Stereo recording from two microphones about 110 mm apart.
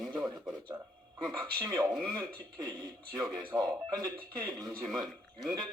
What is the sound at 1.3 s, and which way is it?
Speech, 10° left (ahead or behind).